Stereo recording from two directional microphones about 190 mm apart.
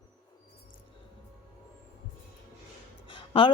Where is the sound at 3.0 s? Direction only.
25° left (ahead or behind).